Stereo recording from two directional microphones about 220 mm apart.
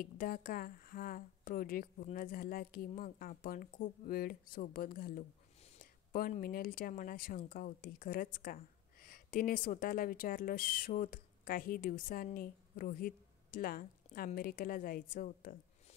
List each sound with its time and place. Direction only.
0.0 s speech: 40° left (ahead or behind)